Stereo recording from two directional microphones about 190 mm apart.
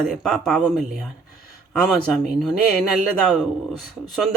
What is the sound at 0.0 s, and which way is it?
A man's voice, centre (ahead or behind).